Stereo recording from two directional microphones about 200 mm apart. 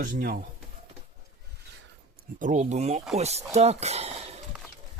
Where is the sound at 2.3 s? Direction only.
40° right (ahead or behind).